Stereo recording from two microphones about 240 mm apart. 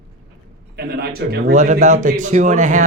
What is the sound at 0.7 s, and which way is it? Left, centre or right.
A man's voice, right.